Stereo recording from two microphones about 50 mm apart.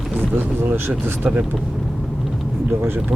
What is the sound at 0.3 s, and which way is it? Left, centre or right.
Speech, right.